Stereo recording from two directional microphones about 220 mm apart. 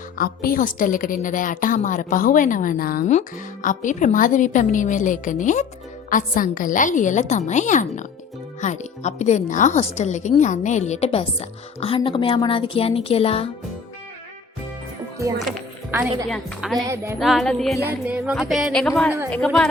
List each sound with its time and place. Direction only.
0.2 s a woman's voice: 40° left (ahead or behind)
15.4 s music: centre (ahead or behind)
16.9 s music: 10° right (ahead or behind)
17.2 s music: centre (ahead or behind)